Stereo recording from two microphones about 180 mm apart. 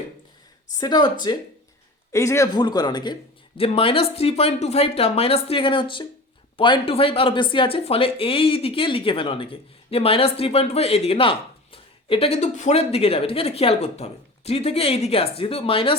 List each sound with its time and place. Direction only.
0.8 s a man's voice: 25° left (ahead or behind)